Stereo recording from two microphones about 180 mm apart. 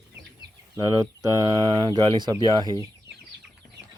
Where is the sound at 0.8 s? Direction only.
20° right (ahead or behind).